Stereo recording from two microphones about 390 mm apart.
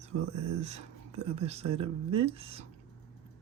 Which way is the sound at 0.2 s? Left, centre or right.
Right.